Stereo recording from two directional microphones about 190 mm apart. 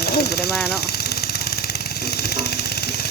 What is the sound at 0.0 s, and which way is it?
Vehicle, 60° left (ahead or behind).